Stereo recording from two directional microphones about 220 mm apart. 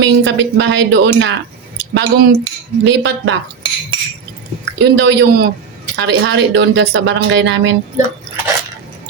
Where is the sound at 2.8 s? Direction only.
55° right (ahead or behind).